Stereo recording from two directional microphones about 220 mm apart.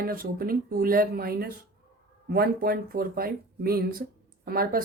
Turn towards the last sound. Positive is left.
turn(degrees=-40)  # may be behind; listen again after turning